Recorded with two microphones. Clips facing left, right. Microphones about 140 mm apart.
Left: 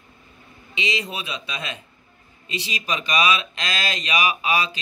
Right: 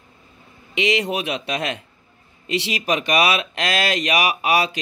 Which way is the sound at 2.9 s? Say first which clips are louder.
Right 3 dB; 60° right (ahead or behind).